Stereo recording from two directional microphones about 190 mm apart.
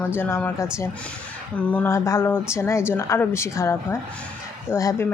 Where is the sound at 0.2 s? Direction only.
10° left (ahead or behind).